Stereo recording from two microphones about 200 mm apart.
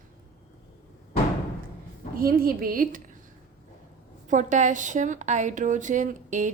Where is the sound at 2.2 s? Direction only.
45° right (ahead or behind).